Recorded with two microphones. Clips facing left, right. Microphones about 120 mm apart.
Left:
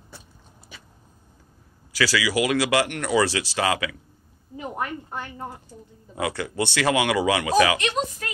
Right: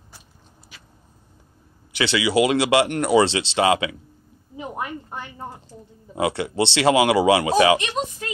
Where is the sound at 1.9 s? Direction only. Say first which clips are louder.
Right 3 dB; 25° right (ahead or behind).